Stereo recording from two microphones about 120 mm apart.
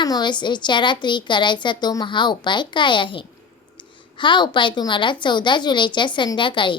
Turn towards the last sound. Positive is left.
turn(degrees=45)  # may be behind; listen again after turning